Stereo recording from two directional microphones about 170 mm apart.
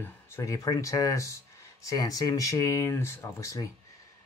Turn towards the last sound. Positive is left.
turn(degrees=20)  # may be behind; listen again after turning